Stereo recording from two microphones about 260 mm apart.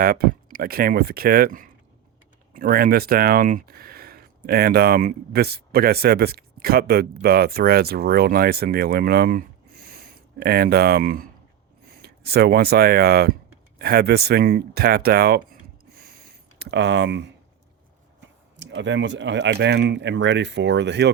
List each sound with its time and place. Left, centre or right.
0.0 s speech: right
16.6 s speech: right
18.5 s speech: right